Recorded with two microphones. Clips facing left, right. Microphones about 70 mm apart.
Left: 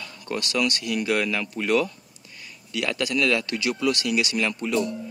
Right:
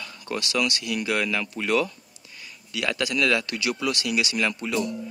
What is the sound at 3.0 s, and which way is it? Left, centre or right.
Speech, left.